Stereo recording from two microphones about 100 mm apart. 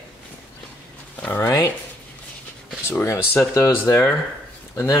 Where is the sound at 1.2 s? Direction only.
20° left (ahead or behind).